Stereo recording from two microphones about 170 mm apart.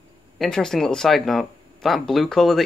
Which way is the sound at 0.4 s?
5° left (ahead or behind).